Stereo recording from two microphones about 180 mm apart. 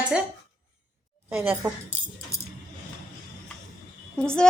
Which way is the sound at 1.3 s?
10° right (ahead or behind).